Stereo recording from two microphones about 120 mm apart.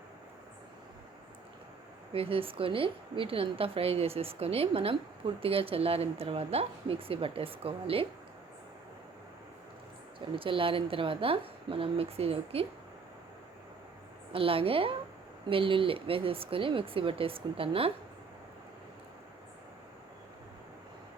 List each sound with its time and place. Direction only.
2.1 s a woman's voice: 50° right (ahead or behind)
10.2 s a woman's voice: 45° right (ahead or behind)
14.3 s a woman's voice: 50° right (ahead or behind)